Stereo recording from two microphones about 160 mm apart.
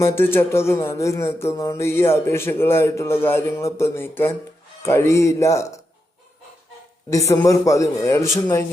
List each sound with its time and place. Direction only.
0.0 s a man's voice: 15° left (ahead or behind)
7.1 s a man's voice: 20° left (ahead or behind)